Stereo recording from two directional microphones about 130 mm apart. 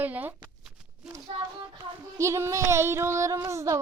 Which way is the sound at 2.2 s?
20° right (ahead or behind).